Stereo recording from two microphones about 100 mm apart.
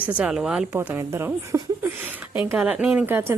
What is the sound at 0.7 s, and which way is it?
A woman's voice, 20° right (ahead or behind).